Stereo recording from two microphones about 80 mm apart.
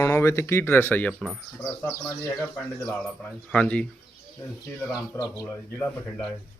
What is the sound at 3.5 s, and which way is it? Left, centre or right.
Speech, centre.